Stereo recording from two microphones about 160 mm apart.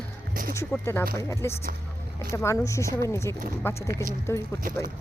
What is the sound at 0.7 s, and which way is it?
A woman's voice, 15° left (ahead or behind).